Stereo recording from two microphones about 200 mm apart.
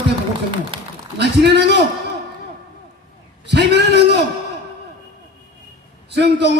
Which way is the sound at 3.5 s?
60° right (ahead or behind).